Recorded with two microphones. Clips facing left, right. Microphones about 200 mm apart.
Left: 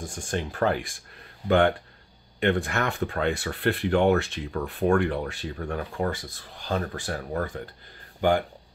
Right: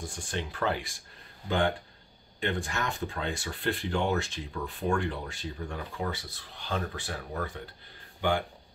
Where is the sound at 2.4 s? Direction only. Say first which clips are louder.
Left 7 dB; 60° left (ahead or behind).